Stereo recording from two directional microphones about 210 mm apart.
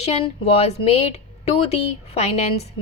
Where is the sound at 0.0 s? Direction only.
30° left (ahead or behind).